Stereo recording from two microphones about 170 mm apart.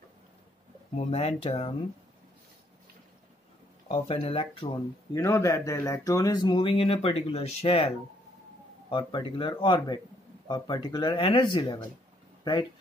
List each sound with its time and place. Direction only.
0.9 s speech: 35° left (ahead or behind)
3.9 s speech: 35° left (ahead or behind)
5.1 s speech: 15° left (ahead or behind); by 7.9 s 35° left (ahead or behind)
8.9 s speech: 25° left (ahead or behind)